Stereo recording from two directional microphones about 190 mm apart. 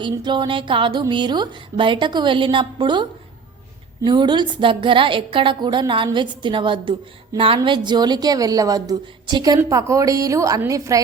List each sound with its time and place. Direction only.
0.0 s a woman's voice: 25° right (ahead or behind)